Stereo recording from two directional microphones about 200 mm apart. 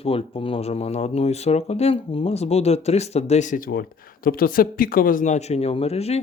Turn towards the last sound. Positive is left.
turn(degrees=30)  # may be behind; listen again after turning